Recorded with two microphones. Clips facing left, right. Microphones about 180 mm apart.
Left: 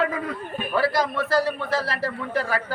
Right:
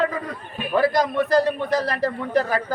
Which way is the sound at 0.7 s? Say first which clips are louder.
Right 4 dB; 20° right (ahead or behind).